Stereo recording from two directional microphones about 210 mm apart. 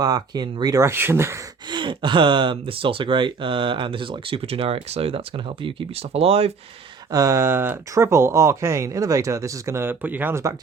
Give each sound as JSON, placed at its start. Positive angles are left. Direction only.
{"t": 0.0, "sound": "speech", "side_deg": -20}
{"t": 7.1, "sound": "speech", "side_deg": -15}